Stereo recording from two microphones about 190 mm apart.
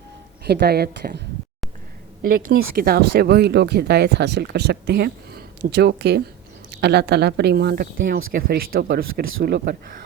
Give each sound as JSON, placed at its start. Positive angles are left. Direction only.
{"t": 0.4, "sound": "speech", "side_deg": -60}
{"t": 2.2, "sound": "speech", "side_deg": -50}